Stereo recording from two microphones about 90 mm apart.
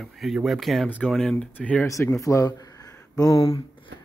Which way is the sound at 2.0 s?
35° left (ahead or behind).